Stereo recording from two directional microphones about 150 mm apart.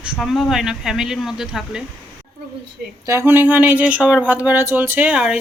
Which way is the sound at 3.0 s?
15° right (ahead or behind).